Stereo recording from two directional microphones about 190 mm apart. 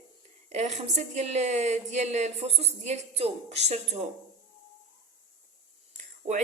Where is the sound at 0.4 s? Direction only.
35° right (ahead or behind).